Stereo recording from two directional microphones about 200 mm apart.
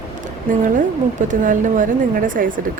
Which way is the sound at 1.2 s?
40° right (ahead or behind).